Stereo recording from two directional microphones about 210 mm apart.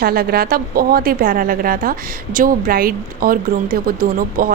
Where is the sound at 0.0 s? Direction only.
45° right (ahead or behind).